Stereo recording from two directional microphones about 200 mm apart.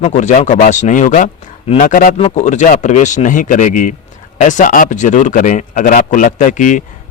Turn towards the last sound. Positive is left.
turn(degrees=40)  # may be behind; listen again after turning